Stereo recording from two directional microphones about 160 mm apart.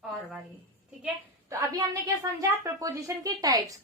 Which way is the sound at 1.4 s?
20° right (ahead or behind).